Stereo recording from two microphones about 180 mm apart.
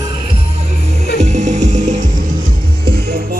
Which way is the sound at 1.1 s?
40° right (ahead or behind).